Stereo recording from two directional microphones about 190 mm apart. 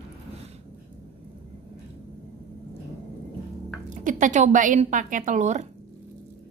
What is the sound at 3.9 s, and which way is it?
A woman's voice, 40° right (ahead or behind).